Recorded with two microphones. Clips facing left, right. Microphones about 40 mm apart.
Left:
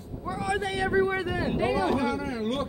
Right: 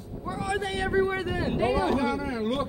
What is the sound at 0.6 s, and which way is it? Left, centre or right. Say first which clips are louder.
Speech: left 1 dB; right.